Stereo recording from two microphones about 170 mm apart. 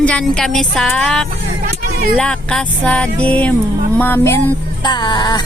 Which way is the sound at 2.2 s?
5° left (ahead or behind).